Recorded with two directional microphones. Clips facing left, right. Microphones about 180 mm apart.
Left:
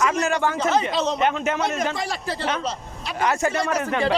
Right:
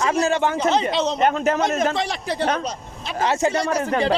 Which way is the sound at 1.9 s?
20° right (ahead or behind).